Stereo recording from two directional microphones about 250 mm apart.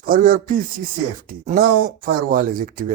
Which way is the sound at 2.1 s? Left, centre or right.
Right.